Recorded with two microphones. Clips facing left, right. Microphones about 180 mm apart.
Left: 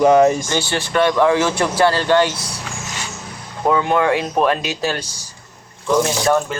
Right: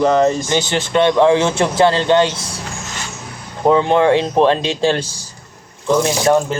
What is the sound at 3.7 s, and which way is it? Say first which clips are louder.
Speech: right 4 dB; 25° right (ahead or behind).